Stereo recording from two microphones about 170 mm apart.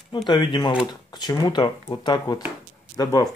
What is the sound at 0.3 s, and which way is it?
Speech, 25° left (ahead or behind).